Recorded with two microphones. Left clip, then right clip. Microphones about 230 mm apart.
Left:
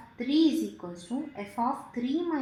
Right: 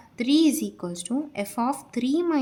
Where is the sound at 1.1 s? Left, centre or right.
Right.